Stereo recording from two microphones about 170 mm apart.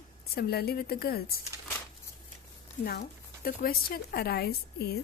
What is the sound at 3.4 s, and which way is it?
A woman's voice, 60° left (ahead or behind).